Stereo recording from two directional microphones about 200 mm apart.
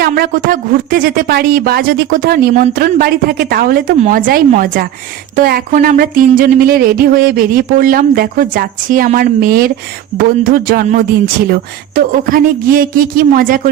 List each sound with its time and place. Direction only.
0.0 s speech: 45° right (ahead or behind)